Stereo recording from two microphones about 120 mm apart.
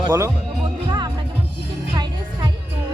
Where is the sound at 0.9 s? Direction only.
40° right (ahead or behind).